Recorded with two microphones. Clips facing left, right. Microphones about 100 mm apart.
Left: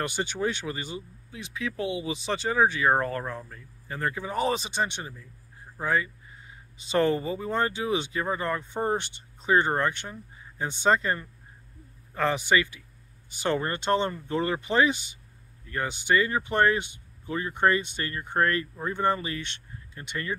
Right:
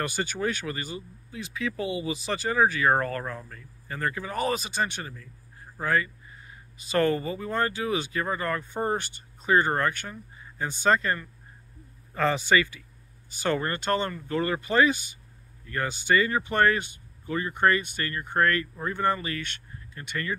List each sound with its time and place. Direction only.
0.0 s speech: 20° left (ahead or behind)
2.9 s speech: 10° left (ahead or behind)
4.2 s speech: 20° left (ahead or behind)
9.7 s speech: 10° left (ahead or behind)